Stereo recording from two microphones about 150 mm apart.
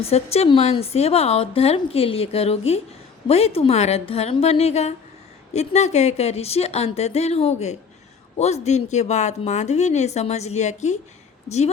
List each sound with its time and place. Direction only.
0.0 s a woman's voice: 45° left (ahead or behind)